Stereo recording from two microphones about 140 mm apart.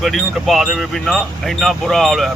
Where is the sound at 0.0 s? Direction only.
Centre (ahead or behind).